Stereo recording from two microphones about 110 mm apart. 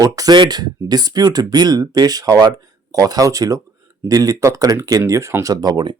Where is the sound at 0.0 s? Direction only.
40° right (ahead or behind).